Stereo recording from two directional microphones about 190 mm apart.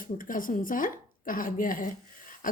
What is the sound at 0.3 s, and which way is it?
Speech, 45° left (ahead or behind).